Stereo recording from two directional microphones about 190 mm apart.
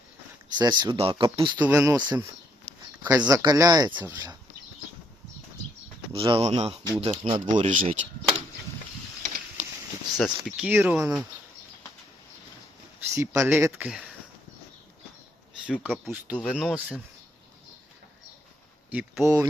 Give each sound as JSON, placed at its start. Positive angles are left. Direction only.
{"t": 0.5, "sound": "speech", "side_deg": -20}
{"t": 1.6, "sound": "speech", "side_deg": -15}
{"t": 6.1, "sound": "speech", "side_deg": -30}
{"t": 7.5, "sound": "speech", "side_deg": -40}
{"t": 9.2, "sound": "a sound", "side_deg": -40}
{"t": 10.2, "sound": "speech", "side_deg": 0}
{"t": 13.1, "sound": "speech", "side_deg": -15}
{"t": 15.8, "sound": "speech", "side_deg": 0}
{"t": 18.9, "sound": "speech", "side_deg": -5}